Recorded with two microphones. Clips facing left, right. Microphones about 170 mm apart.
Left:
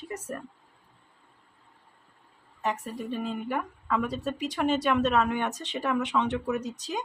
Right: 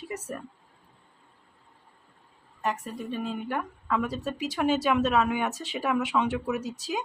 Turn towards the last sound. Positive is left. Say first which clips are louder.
# right 1 dB
turn(degrees=-5)  # may be behind; listen again after turning